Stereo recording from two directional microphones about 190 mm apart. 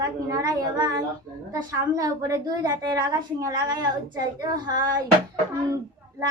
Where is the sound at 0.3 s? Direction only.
20° right (ahead or behind).